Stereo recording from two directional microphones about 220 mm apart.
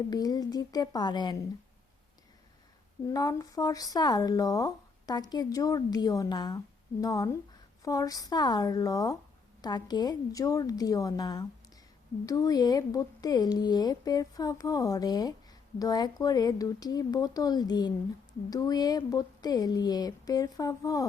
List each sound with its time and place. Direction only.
0.1 s speech: 15° left (ahead or behind)
3.1 s speech: 15° left (ahead or behind)